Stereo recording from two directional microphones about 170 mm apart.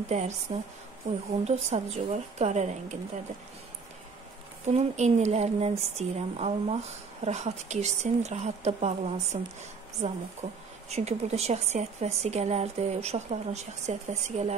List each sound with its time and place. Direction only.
0.1 s a woman's voice: 40° right (ahead or behind)
4.6 s a woman's voice: 40° right (ahead or behind)